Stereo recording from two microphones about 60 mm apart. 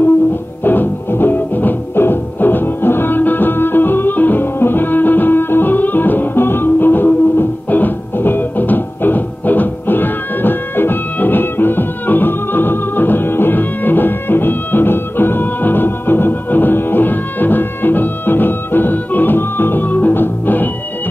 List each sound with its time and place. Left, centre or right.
0.7 s music: left